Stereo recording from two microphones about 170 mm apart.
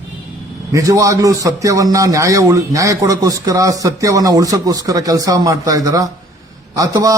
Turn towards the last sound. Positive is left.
turn(degrees=-20)  # may be behind; listen again after turning